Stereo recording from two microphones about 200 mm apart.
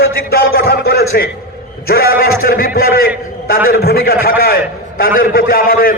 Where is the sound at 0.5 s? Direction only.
50° left (ahead or behind).